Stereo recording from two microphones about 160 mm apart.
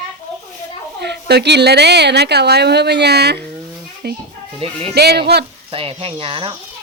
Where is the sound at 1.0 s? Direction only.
90° right.